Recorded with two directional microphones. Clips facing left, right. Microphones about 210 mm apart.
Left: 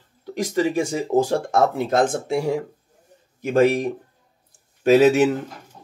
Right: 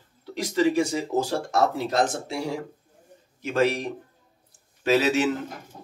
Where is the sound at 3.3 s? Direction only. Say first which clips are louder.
Left 6 dB; 50° left (ahead or behind).